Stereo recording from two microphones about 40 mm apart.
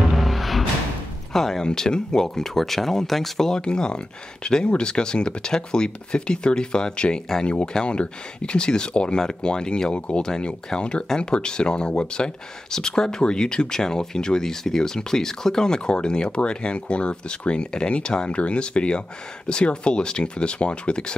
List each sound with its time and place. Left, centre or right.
0.1 s music: centre
1.3 s speech: centre
1.6 s speech: centre
10.2 s speech: centre
12.7 s speech: centre